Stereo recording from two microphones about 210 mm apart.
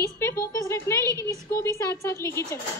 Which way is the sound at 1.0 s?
15° right (ahead or behind).